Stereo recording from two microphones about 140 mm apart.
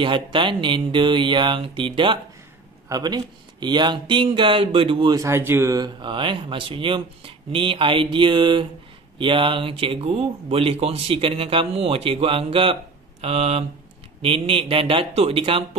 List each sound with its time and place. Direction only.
0.0 s speech: 35° right (ahead or behind)
5.1 s speech: 20° right (ahead or behind); by 15.6 s 40° right (ahead or behind)